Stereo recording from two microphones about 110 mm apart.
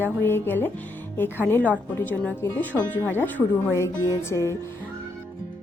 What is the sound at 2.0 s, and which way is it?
Speech, 15° left (ahead or behind).